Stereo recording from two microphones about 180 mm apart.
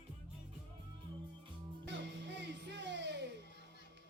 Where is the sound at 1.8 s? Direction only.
80° right.